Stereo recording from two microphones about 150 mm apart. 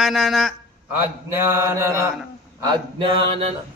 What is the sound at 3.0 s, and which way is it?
Mantra, 35° right (ahead or behind).